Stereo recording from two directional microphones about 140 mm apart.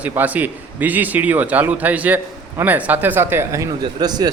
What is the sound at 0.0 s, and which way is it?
A man's voice, 10° right (ahead or behind).